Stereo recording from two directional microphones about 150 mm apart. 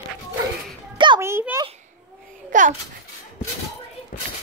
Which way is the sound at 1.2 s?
15° right (ahead or behind).